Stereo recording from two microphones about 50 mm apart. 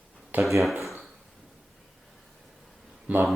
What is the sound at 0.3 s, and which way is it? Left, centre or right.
Speech, right.